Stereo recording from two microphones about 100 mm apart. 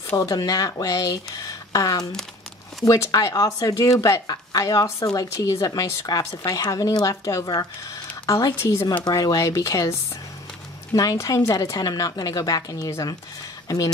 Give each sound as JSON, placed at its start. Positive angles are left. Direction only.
{"t": 0.1, "sound": "speech", "side_deg": 40}
{"t": 11.0, "sound": "speech", "side_deg": 35}